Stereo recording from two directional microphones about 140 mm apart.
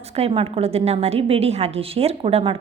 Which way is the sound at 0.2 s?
45° right (ahead or behind).